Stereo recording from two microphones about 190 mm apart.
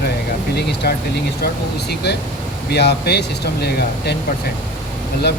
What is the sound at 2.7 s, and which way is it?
Speech, 60° left (ahead or behind).